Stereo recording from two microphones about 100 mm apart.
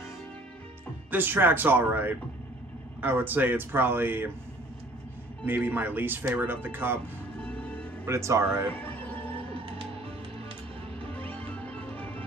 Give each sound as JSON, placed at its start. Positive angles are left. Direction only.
{"t": 1.1, "sound": "speech", "side_deg": -20}
{"t": 5.4, "sound": "speech", "side_deg": -20}
{"t": 7.4, "sound": "music", "side_deg": 15}
{"t": 8.0, "sound": "speech", "side_deg": -30}
{"t": 11.1, "sound": "music", "side_deg": 15}